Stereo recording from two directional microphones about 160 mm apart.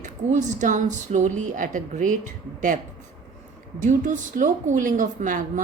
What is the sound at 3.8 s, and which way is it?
Speech, 50° right (ahead or behind).